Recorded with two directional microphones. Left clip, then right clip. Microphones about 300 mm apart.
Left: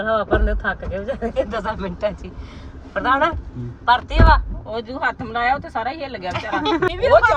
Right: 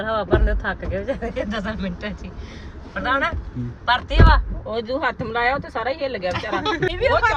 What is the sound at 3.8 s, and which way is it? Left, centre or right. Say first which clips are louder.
Speech: left 3 dB; centre.